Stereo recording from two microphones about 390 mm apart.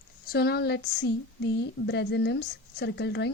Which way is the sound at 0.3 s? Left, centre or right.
Left.